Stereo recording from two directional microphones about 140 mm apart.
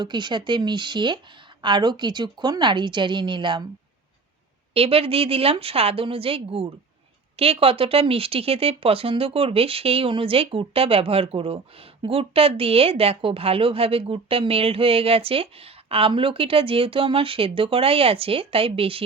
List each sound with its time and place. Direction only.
0.0 s a woman's voice: 30° right (ahead or behind)
4.7 s speech: 45° right (ahead or behind)